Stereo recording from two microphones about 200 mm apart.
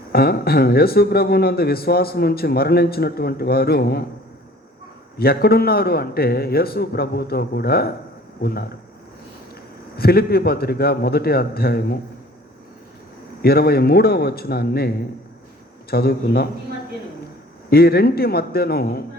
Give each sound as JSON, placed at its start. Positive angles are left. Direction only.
{"t": 0.1, "sound": "speech", "side_deg": 50}
{"t": 5.1, "sound": "speech", "side_deg": 50}
{"t": 9.9, "sound": "speech", "side_deg": 50}
{"t": 13.4, "sound": "speech", "side_deg": 50}
{"t": 17.7, "sound": "speech", "side_deg": 50}